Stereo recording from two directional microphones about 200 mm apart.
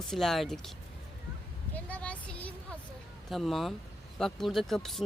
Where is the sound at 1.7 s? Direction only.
5° left (ahead or behind).